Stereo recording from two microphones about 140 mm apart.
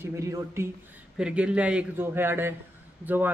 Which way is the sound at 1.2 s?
5° right (ahead or behind).